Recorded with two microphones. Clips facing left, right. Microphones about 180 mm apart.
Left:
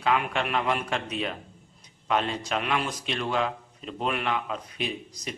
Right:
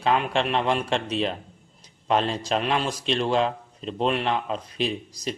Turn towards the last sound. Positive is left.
turn(degrees=-30)  # may be behind; listen again after turning